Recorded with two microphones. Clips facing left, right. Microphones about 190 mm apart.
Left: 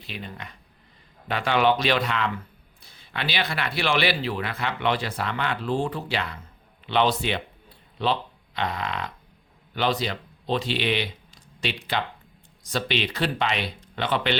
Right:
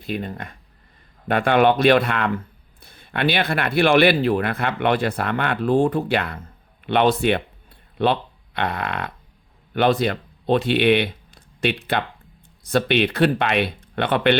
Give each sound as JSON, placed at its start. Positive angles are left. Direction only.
{"t": 0.0, "sound": "speech", "side_deg": -50}